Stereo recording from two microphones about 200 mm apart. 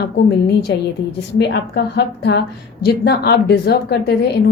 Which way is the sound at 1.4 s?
55° left (ahead or behind).